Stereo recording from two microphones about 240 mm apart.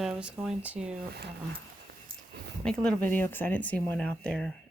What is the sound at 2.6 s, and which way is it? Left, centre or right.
Speech, centre.